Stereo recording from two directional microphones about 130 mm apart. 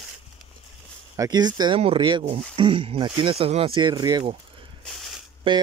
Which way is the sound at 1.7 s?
45° right (ahead or behind).